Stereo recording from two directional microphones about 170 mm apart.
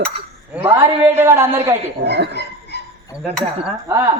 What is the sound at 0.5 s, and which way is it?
A man's voice, 10° right (ahead or behind).